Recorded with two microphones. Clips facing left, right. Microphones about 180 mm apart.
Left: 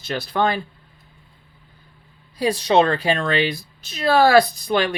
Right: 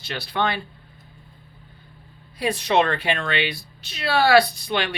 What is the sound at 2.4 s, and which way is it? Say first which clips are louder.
Speech: left 4 dB; 35° left (ahead or behind).